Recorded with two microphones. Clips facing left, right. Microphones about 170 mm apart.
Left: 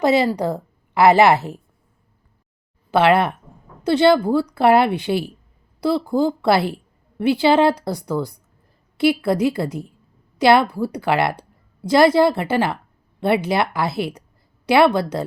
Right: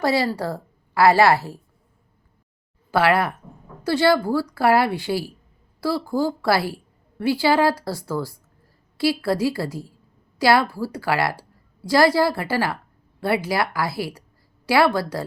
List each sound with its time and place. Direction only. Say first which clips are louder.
0.0 s a woman's voice: left 4 dB; 20° left (ahead or behind)
2.9 s a woman's voice: left 4 dB; 20° left (ahead or behind)